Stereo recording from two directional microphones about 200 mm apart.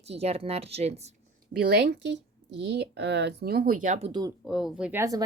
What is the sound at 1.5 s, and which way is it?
Speech, 50° right (ahead or behind).